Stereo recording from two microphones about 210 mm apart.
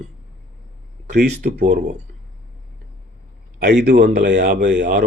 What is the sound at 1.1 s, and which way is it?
Speech, 50° right (ahead or behind).